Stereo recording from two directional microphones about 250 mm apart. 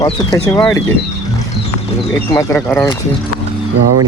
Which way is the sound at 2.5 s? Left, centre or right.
Centre.